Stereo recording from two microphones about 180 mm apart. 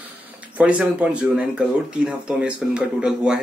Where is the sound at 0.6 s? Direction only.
5° right (ahead or behind).